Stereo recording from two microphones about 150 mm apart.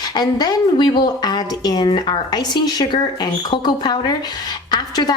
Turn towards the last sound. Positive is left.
turn(degrees=30)  # may be behind; listen again after turning